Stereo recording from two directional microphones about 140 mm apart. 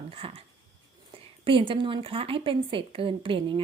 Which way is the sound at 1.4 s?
40° right (ahead or behind).